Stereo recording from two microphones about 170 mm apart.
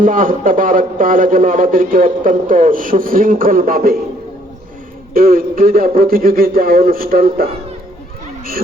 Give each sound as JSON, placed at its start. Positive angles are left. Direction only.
{"t": 0.0, "sound": "a man's voice", "side_deg": -55}
{"t": 5.1, "sound": "a man's voice", "side_deg": -60}